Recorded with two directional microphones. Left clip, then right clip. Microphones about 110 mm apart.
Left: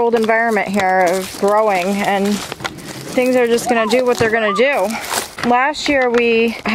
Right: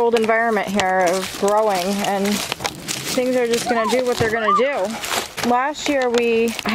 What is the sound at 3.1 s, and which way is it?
Speech, 65° left (ahead or behind).